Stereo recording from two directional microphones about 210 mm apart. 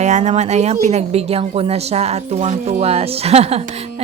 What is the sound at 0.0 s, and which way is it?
A woman's voice, 35° right (ahead or behind).